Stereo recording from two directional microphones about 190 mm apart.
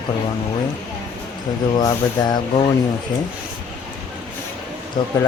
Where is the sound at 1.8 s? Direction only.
20° left (ahead or behind).